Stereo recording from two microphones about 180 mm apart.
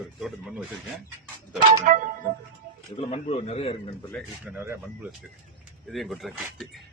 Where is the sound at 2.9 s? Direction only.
35° left (ahead or behind).